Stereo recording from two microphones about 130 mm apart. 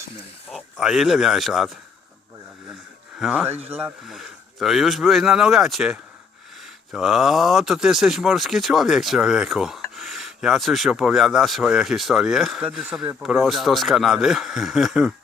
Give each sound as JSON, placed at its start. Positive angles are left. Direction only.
{"t": 0.5, "sound": "speech", "side_deg": -5}
{"t": 3.2, "sound": "speech", "side_deg": -10}